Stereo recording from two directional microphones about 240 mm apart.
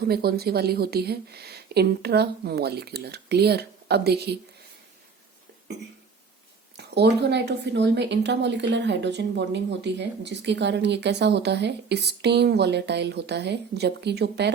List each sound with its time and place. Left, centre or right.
0.0 s speech: right
6.7 s speech: right